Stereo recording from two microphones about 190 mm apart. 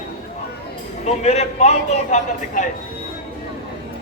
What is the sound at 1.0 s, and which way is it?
A man's voice, 35° left (ahead or behind).